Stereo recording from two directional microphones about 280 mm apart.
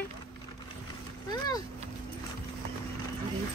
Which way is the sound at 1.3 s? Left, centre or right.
Centre.